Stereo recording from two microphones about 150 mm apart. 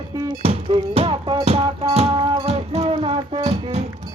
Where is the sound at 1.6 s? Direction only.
35° right (ahead or behind).